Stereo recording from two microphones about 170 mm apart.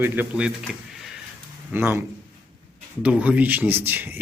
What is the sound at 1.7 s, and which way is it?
Speech, 15° right (ahead or behind).